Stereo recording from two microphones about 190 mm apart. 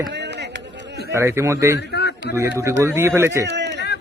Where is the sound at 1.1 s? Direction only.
15° right (ahead or behind).